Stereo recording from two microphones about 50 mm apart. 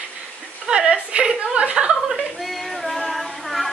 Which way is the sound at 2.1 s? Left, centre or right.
Centre.